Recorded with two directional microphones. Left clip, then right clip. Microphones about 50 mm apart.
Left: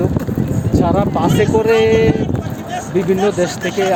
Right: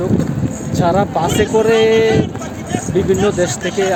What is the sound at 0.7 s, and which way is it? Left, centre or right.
Speech, centre.